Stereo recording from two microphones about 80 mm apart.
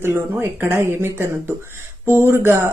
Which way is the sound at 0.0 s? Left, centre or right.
Right.